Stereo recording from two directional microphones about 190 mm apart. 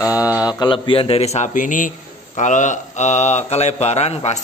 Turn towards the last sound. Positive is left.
turn(degrees=35)  # may be behind; listen again after turning